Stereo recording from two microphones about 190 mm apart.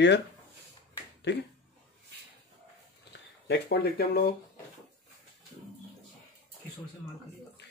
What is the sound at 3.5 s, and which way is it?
Speech, 55° left (ahead or behind).